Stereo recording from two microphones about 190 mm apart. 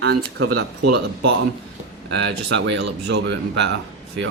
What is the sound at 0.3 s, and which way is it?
Speech, 65° right (ahead or behind).